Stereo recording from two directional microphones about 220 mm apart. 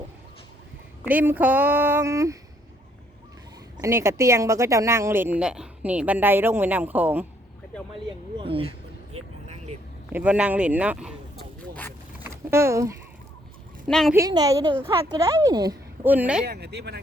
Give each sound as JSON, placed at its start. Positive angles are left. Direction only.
{"t": 1.0, "sound": "speech", "side_deg": -10}
{"t": 3.8, "sound": "speech", "side_deg": -15}
{"t": 8.4, "sound": "a sound", "side_deg": -25}
{"t": 10.1, "sound": "speech", "side_deg": -5}
{"t": 12.2, "sound": "a sound", "side_deg": -10}
{"t": 13.8, "sound": "speech", "side_deg": 0}
{"t": 14.1, "sound": "speech", "side_deg": -15}
{"t": 16.5, "sound": "speech", "side_deg": -45}